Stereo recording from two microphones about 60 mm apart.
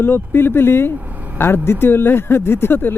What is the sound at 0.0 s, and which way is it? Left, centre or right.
Speech, left.